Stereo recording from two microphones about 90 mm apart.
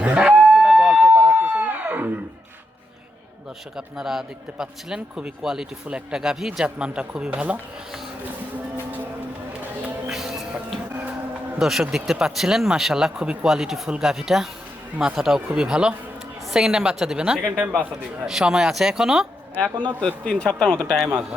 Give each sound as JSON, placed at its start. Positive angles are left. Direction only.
{"t": 0.0, "sound": "a sound", "side_deg": -15}
{"t": 3.8, "sound": "a man's voice", "side_deg": -5}
{"t": 10.1, "sound": "music", "side_deg": -5}
{"t": 11.6, "sound": "a man's voice", "side_deg": -5}
{"t": 18.3, "sound": "speech", "side_deg": -5}
{"t": 20.0, "sound": "a man's voice", "side_deg": 10}